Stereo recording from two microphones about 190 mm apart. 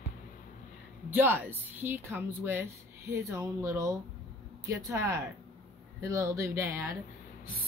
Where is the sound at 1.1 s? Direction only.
10° right (ahead or behind).